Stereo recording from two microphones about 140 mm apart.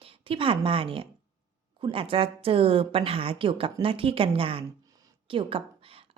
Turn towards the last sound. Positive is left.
turn(degrees=-40)  # may be behind; listen again after turning